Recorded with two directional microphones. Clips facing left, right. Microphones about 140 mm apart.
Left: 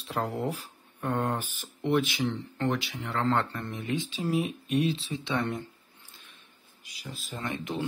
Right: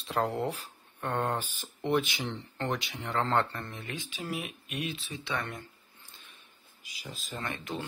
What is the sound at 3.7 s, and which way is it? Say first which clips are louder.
Speech: left 8 dB; 20° left (ahead or behind).